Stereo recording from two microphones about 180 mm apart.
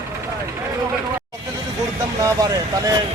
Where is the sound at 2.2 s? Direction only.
20° right (ahead or behind).